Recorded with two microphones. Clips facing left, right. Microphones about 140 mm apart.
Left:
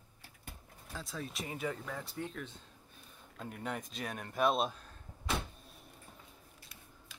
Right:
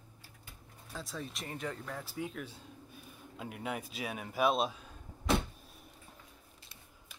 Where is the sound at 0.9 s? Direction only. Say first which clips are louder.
Even; centre (ahead or behind).